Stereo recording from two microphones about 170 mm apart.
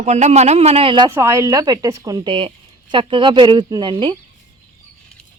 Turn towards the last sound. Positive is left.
turn(degrees=-30)  # may be behind; listen again after turning